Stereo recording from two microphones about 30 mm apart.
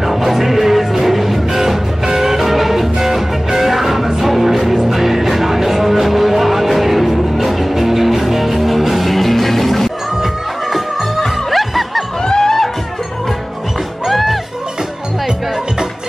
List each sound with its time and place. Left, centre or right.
0.0 s music: centre
12.3 s music: centre
14.0 s music: centre